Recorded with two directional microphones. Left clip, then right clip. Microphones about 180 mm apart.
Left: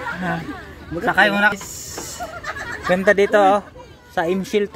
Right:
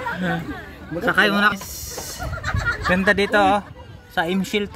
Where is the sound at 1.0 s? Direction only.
5° left (ahead or behind).